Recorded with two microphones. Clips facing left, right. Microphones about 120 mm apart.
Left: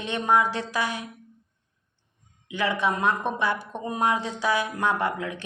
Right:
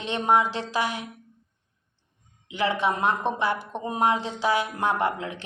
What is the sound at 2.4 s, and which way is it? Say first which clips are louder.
A woman's voice: right 1 dB; 20° right (ahead or behind).